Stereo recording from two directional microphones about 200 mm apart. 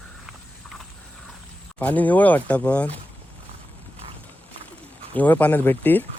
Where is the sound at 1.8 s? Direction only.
10° left (ahead or behind).